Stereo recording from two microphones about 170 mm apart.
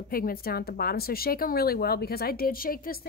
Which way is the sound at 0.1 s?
60° left (ahead or behind).